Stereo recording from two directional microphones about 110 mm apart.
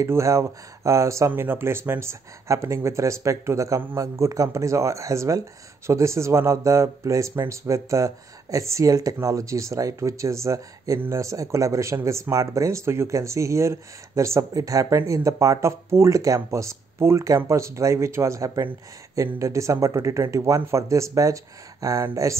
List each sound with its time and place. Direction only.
0.0 s speech: 25° right (ahead or behind)